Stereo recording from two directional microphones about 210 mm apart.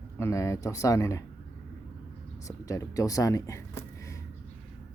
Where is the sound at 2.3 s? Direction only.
15° left (ahead or behind).